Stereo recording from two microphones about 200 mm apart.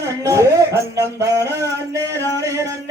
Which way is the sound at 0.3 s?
15° right (ahead or behind).